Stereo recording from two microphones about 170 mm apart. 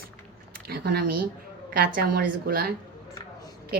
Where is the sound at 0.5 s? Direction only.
65° right (ahead or behind).